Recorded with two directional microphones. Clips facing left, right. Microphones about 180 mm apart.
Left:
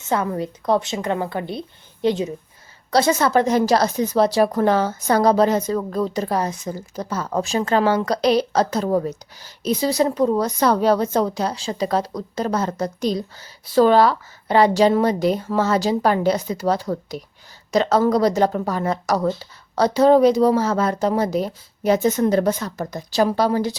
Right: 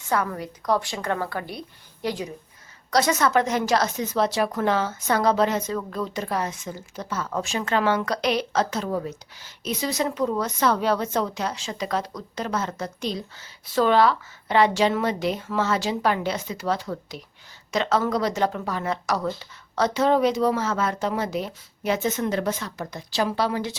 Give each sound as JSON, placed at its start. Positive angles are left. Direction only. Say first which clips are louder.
{"t": 0.0, "sound": "a woman's voice", "louder": "left 4 dB", "side_deg": 25}